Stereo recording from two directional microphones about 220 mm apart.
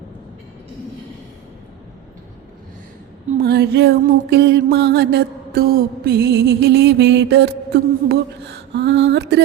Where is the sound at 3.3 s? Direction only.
45° right (ahead or behind).